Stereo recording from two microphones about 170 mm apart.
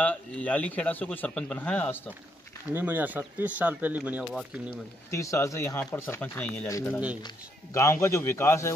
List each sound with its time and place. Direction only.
0.0 s speech: 10° left (ahead or behind)
2.7 s speech: 10° right (ahead or behind)
4.2 s speech: centre (ahead or behind)
5.1 s speech: 15° left (ahead or behind)